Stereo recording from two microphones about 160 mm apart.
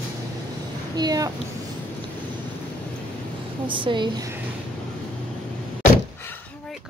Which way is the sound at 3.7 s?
30° right (ahead or behind).